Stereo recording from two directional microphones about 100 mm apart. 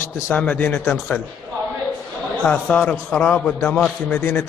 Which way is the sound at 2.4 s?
15° left (ahead or behind).